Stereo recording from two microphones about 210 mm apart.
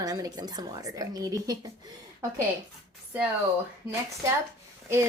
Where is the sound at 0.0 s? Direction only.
15° right (ahead or behind).